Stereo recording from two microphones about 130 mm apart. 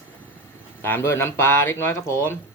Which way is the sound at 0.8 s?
20° left (ahead or behind).